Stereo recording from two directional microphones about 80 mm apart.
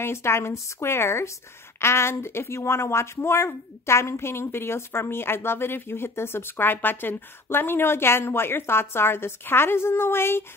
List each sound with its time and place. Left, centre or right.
0.0 s a woman's voice: left